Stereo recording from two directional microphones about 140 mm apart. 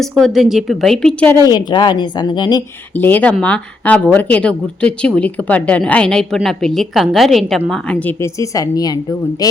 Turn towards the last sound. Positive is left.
turn(degrees=0)  # may be behind; listen again after turning